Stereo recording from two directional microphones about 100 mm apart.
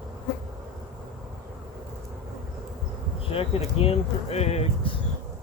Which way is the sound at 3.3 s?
70° left (ahead or behind).